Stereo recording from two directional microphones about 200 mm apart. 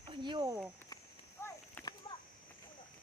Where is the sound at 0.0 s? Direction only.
25° right (ahead or behind).